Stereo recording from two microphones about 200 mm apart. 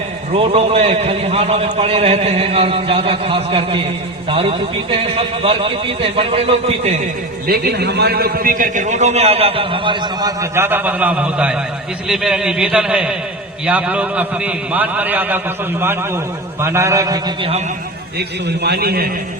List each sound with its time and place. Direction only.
0.3 s a man's voice: 30° right (ahead or behind)
7.4 s a man's voice: 50° right (ahead or behind); by 17.6 s 25° right (ahead or behind)
18.2 s a man's voice: 55° right (ahead or behind)